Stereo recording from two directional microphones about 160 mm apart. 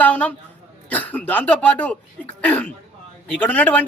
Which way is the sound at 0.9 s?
10° left (ahead or behind).